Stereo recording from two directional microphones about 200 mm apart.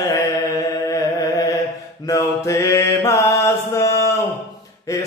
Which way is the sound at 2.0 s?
15° left (ahead or behind).